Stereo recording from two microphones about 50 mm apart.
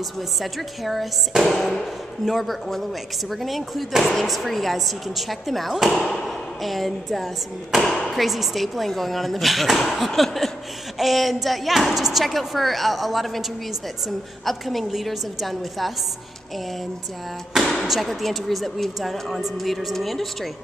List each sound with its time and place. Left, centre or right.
0.4 s speech: centre
1.4 s music: centre
2.2 s speech: centre
7.7 s music: centre
8.1 s speech: centre
17.8 s speech: centre